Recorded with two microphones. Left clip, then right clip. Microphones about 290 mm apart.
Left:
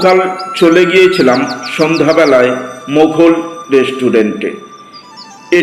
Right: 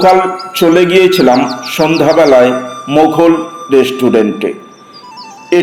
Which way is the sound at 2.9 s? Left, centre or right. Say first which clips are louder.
Even; right.